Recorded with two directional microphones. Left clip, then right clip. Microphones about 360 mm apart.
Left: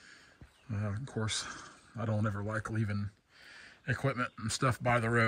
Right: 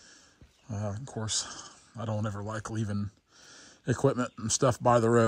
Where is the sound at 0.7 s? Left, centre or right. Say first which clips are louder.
Right 3 dB; centre.